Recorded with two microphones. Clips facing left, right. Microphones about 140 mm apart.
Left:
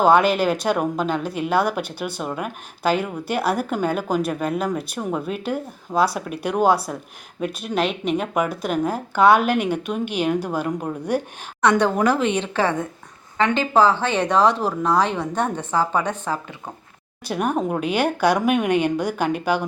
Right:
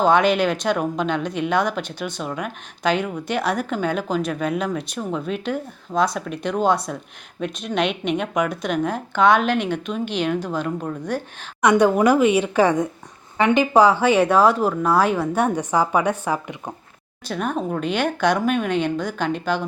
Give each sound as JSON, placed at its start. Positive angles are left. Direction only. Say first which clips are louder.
{"t": 0.0, "sound": "speech", "louder": "left 1 dB", "side_deg": 5}
{"t": 11.6, "sound": "speech", "louder": "right 2 dB", "side_deg": -10}
{"t": 17.2, "sound": "speech", "louder": "left 2 dB", "side_deg": 10}